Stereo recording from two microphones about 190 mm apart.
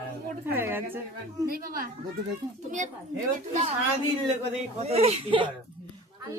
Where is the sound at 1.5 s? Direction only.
50° right (ahead or behind).